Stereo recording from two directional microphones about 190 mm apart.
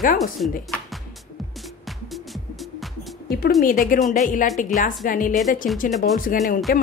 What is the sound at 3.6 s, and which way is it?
A woman's voice, 45° left (ahead or behind).